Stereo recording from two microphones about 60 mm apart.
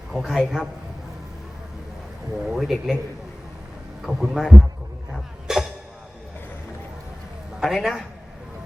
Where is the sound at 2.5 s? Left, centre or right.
Centre.